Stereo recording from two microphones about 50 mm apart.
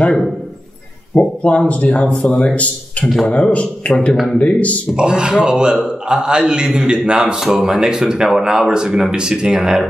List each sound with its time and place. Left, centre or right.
1.1 s a man's voice: left
4.9 s a man's voice: centre